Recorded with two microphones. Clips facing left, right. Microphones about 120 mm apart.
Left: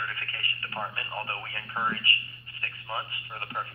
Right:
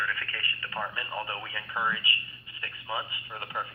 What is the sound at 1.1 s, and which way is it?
Speech, 10° right (ahead or behind).